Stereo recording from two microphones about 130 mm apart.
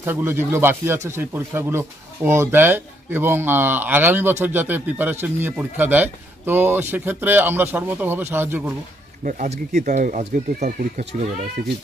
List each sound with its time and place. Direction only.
0.0 s speech: 15° right (ahead or behind)
9.2 s speech: 70° right (ahead or behind)